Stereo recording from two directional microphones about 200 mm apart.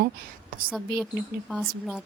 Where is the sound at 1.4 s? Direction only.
Centre (ahead or behind).